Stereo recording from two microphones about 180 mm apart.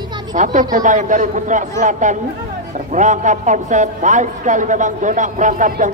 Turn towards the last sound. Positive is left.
turn(degrees=-45)  # may be behind; listen again after turning